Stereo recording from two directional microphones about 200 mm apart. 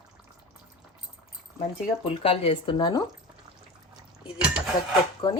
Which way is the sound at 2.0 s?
30° left (ahead or behind).